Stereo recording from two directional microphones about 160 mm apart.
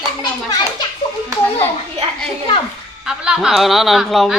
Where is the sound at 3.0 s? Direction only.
5° right (ahead or behind).